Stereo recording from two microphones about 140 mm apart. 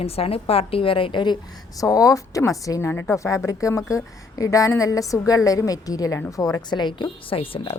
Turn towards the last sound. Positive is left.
turn(degrees=40)  # may be behind; listen again after turning